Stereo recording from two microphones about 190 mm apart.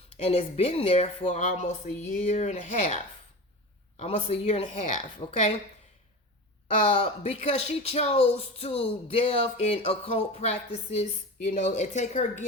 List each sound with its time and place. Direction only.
0.1 s speech: 35° left (ahead or behind)
6.8 s speech: 30° left (ahead or behind)